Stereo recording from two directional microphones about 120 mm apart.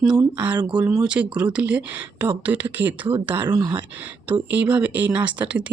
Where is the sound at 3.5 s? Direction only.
35° right (ahead or behind).